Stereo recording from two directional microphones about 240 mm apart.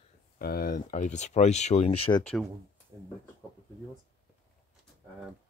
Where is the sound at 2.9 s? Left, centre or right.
Centre.